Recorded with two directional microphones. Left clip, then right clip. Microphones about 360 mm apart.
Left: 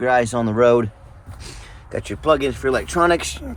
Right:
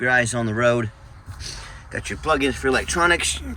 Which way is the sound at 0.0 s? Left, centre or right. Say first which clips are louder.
Left 2 dB; centre.